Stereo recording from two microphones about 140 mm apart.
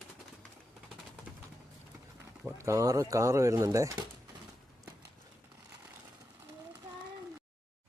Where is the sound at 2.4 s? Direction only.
20° right (ahead or behind).